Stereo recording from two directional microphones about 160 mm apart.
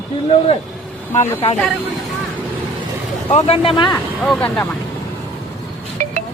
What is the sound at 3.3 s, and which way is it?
Speech, 40° left (ahead or behind).